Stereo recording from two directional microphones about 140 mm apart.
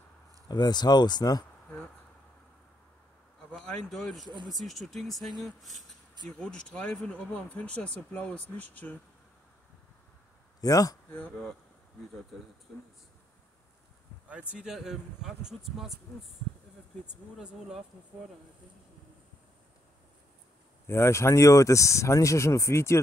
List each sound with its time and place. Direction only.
0.5 s speech: 30° left (ahead or behind)
3.5 s speech: 5° left (ahead or behind)
10.6 s speech: 25° left (ahead or behind)
11.1 s speech: 15° left (ahead or behind)
12.7 s speech: 5° left (ahead or behind)
14.5 s speech: 5° right (ahead or behind)
17.0 s speech: 5° right (ahead or behind)
20.8 s speech: 20° left (ahead or behind)